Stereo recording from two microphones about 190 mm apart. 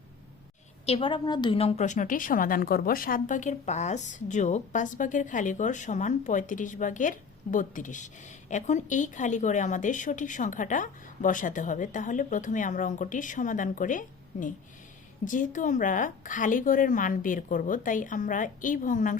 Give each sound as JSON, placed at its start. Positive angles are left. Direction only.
{"t": 0.9, "sound": "a woman's voice", "side_deg": 30}